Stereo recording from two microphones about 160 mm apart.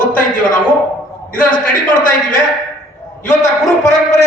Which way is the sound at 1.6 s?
60° left (ahead or behind).